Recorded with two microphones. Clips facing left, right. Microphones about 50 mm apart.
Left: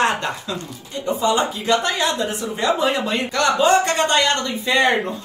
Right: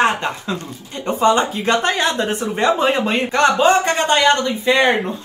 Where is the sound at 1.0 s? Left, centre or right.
Right.